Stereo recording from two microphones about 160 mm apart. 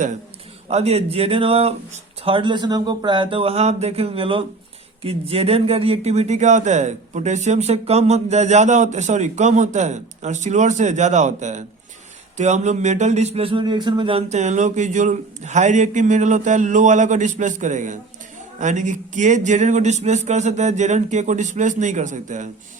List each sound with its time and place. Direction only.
0.7 s speech: 40° right (ahead or behind)